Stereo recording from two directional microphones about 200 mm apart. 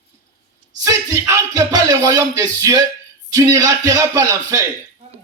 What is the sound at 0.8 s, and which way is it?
Speech, 20° right (ahead or behind).